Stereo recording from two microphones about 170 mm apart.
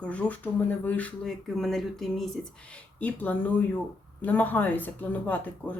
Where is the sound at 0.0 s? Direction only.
5° left (ahead or behind).